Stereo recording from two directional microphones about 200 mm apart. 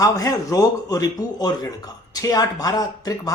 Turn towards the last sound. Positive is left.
turn(degrees=20)  # may be behind; listen again after turning